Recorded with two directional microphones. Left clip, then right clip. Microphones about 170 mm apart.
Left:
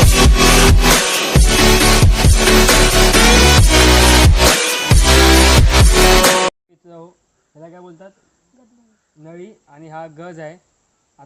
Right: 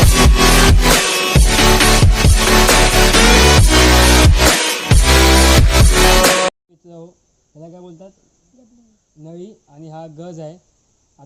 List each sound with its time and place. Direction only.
0.0 s music: centre (ahead or behind)
6.8 s a sound: 30° left (ahead or behind)
7.6 s cricket: 30° left (ahead or behind)
10.3 s speech: 5° left (ahead or behind)